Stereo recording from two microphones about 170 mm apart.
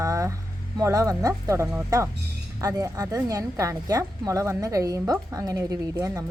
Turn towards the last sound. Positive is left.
turn(degrees=-20)  # may be behind; listen again after turning